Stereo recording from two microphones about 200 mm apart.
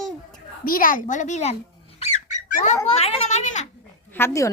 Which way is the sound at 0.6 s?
45° left (ahead or behind).